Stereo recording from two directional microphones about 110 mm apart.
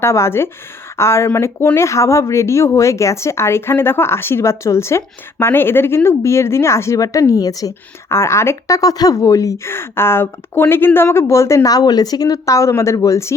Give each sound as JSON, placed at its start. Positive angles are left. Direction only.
{"t": 0.0, "sound": "speech", "side_deg": 25}